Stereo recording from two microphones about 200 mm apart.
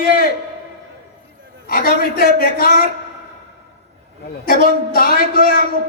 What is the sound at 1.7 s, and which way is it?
A man's voice, 50° left (ahead or behind).